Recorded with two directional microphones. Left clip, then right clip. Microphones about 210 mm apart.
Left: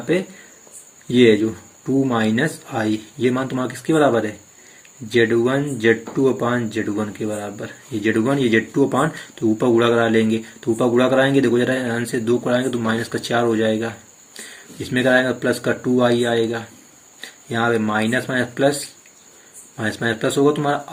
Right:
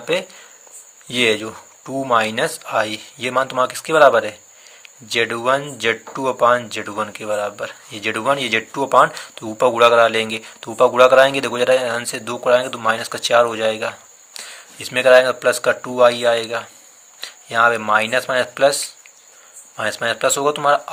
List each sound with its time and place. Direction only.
1.1 s speech: 35° right (ahead or behind)
19.7 s speech: 35° right (ahead or behind)